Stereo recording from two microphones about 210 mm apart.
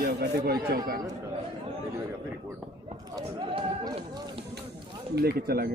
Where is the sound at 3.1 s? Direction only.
20° right (ahead or behind).